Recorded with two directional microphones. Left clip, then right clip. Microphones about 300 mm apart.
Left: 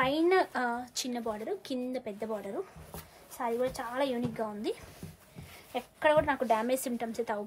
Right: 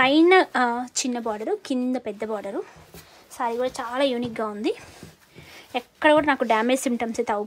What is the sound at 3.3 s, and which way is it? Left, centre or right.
A woman's voice, right.